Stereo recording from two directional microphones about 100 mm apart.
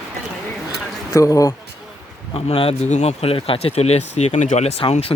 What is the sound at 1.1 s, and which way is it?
Speech, 35° left (ahead or behind).